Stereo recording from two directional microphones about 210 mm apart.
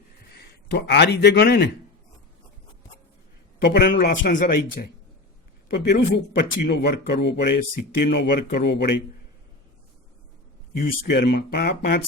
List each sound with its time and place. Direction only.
0.3 s a man's voice: 50° left (ahead or behind)
3.6 s speech: 50° left (ahead or behind)
5.7 s speech: 50° left (ahead or behind)
10.8 s speech: 50° left (ahead or behind)